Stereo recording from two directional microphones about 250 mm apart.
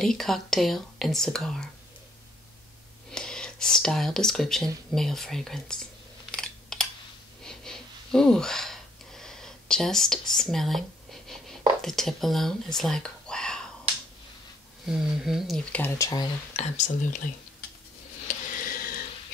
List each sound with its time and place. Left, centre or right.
0.0 s speech: centre
3.1 s speech: centre
6.3 s computer keyboard: centre
7.4 s a sound: centre
11.8 s speech: centre
14.9 s speech: centre
16.5 s speech: left
18.6 s a sound: left